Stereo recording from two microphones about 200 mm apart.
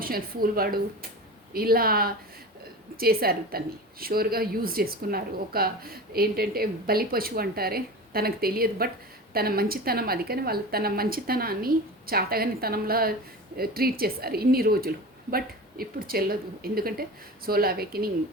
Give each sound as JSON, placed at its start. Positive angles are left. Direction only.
{"t": 0.0, "sound": "speech", "side_deg": -45}